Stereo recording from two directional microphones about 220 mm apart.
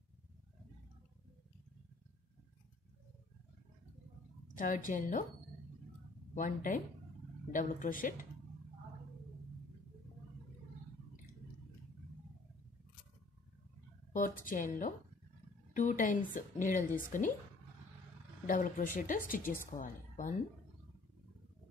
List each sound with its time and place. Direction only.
4.6 s a woman's voice: 35° left (ahead or behind)
6.3 s a woman's voice: 35° left (ahead or behind)
14.1 s a woman's voice: 40° left (ahead or behind)
18.5 s a woman's voice: 35° left (ahead or behind)